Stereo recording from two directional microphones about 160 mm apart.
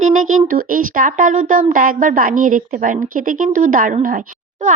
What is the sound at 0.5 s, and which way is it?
A woman's voice, 65° right (ahead or behind).